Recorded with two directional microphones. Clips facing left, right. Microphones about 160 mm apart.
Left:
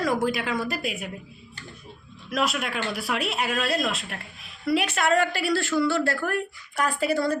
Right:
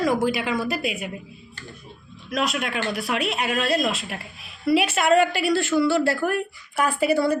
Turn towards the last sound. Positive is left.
turn(degrees=-10)  # may be behind; listen again after turning